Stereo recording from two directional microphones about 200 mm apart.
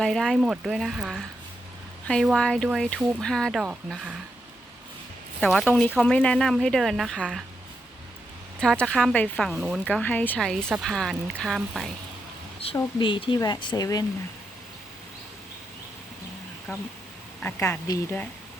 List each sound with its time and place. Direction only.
0.0 s speech: centre (ahead or behind)
5.4 s speech: 5° left (ahead or behind)
8.6 s a woman's voice: 5° left (ahead or behind)
12.7 s speech: 25° left (ahead or behind)
17.4 s a woman's voice: 10° left (ahead or behind)